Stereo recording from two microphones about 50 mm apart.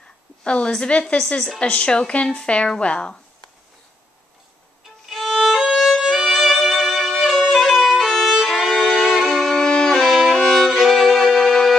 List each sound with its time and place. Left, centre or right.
0.4 s a woman's voice: centre
5.0 s violin: centre